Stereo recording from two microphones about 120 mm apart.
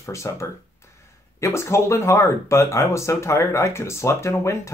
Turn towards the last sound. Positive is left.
turn(degrees=25)  # may be behind; listen again after turning